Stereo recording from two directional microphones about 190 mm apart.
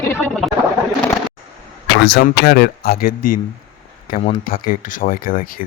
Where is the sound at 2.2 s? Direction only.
55° left (ahead or behind).